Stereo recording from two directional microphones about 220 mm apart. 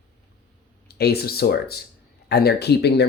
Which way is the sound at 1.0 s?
45° left (ahead or behind).